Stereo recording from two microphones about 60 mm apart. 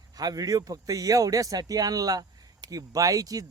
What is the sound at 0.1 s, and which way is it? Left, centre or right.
A man's voice, right.